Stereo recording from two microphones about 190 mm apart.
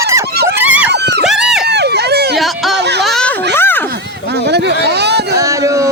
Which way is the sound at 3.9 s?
60° right (ahead or behind).